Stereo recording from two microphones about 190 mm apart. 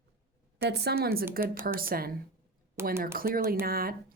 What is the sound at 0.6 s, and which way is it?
A woman's voice, 55° right (ahead or behind).